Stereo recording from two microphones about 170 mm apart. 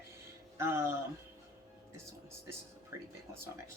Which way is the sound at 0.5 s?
15° right (ahead or behind).